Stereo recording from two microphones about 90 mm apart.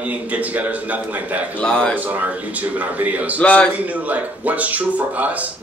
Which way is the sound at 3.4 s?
15° left (ahead or behind).